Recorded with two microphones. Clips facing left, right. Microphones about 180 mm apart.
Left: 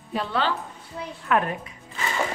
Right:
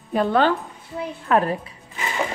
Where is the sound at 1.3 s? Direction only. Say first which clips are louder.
Right 4 dB; 35° right (ahead or behind).